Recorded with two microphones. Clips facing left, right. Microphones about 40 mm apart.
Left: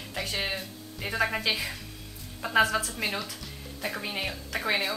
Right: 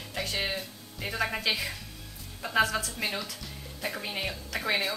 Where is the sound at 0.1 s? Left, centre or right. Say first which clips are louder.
Even; centre.